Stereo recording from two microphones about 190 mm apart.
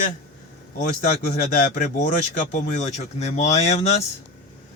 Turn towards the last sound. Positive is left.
turn(degrees=35)  # may be behind; listen again after turning